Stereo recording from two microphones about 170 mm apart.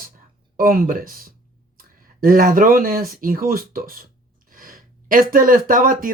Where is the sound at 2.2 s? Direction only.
55° right (ahead or behind).